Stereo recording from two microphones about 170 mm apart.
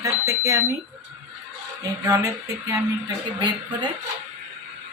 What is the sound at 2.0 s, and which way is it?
Speech, 20° right (ahead or behind).